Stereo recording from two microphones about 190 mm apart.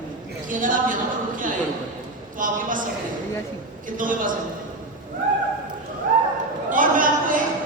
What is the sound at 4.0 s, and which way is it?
Speech, 45° right (ahead or behind).